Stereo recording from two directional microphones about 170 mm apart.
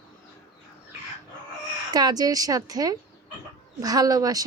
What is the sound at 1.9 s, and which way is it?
A woman's voice, 25° right (ahead or behind).